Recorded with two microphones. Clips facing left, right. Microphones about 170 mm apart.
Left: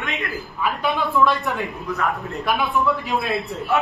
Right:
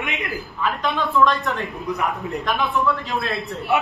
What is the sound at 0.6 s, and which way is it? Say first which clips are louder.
A woman's voice: left 1 dB; 10° left (ahead or behind).